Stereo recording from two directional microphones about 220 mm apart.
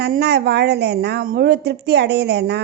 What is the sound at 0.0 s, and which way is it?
A woman's voice, 50° right (ahead or behind).